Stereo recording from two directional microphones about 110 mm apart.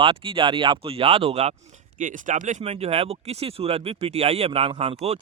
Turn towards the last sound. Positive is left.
turn(degrees=-65)  # may be behind; listen again after turning